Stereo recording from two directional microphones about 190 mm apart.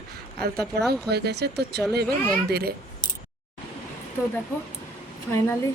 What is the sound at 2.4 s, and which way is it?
Speech, 55° right (ahead or behind).